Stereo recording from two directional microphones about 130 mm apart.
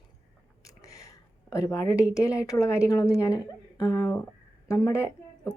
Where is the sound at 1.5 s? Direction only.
25° left (ahead or behind).